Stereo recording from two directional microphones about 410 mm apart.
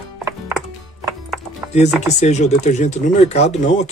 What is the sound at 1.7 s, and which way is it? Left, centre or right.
Speech, centre.